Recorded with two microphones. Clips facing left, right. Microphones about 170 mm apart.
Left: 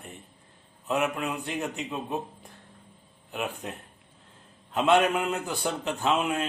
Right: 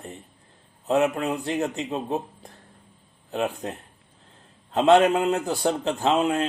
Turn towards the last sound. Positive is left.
turn(degrees=-35)  # may be behind; listen again after turning